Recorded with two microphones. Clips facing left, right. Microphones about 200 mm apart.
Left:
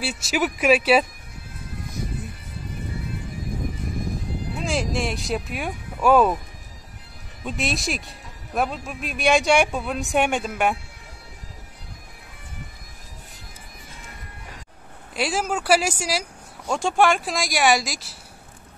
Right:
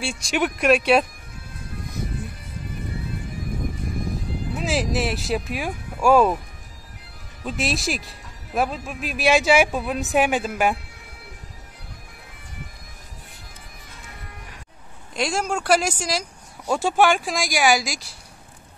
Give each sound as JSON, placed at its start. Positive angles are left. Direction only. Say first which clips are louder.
{"t": 0.0, "sound": "speech", "louder": "even", "side_deg": 5}
{"t": 4.6, "sound": "speech", "louder": "right 2 dB", "side_deg": -5}
{"t": 7.4, "sound": "speech", "louder": "right 1 dB", "side_deg": 0}
{"t": 15.1, "sound": "speech", "louder": "even", "side_deg": 5}
{"t": 16.6, "sound": "speech", "louder": "right 1 dB", "side_deg": -5}